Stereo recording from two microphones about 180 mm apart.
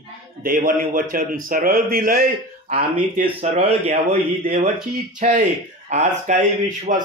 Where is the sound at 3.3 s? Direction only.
35° right (ahead or behind).